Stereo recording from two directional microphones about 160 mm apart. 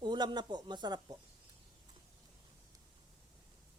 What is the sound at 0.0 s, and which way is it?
Speech, 25° right (ahead or behind).